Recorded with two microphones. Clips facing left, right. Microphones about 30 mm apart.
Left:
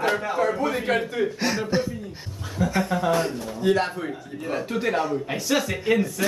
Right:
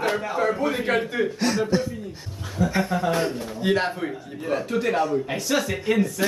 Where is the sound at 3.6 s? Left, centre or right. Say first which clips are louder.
Left 1 dB; right.